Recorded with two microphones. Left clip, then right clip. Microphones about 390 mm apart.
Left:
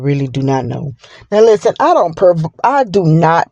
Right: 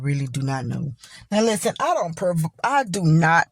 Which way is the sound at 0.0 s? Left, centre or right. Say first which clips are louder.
Left 13 dB; right.